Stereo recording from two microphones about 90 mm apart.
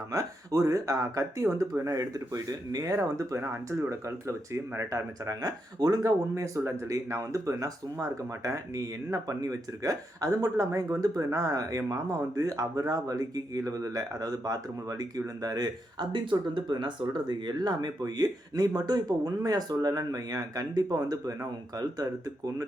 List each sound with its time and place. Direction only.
0.1 s speech: 40° right (ahead or behind)